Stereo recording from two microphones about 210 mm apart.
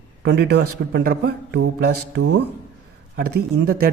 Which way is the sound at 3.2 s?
45° right (ahead or behind).